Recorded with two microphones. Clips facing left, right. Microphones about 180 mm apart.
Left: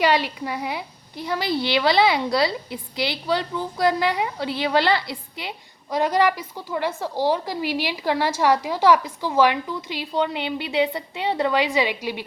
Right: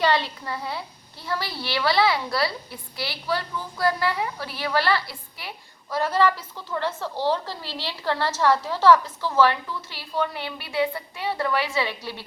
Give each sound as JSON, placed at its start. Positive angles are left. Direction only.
{"t": 0.0, "sound": "a woman's voice", "side_deg": 15}